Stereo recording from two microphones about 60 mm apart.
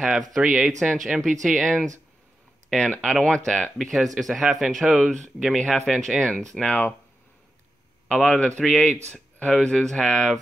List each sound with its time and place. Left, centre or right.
0.5 s speech: centre
3.7 s speech: centre
5.8 s speech: centre
6.6 s speech: left
8.1 s speech: centre